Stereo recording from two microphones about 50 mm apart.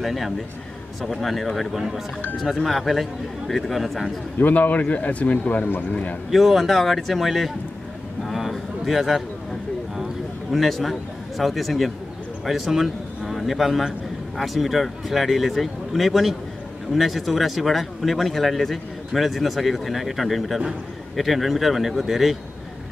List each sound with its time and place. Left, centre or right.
0.0 s speech: centre
4.4 s a man's voice: left
6.3 s speech: centre
8.3 s a sound: centre
10.5 s a man's voice: centre